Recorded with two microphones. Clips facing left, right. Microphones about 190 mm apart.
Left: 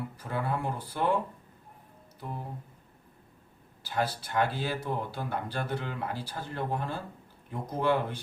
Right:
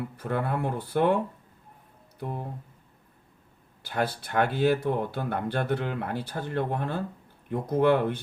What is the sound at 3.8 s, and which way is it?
Speech, 55° right (ahead or behind).